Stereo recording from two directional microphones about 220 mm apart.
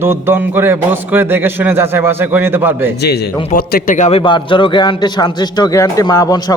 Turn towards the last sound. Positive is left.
turn(degrees=15)  # may be behind; listen again after turning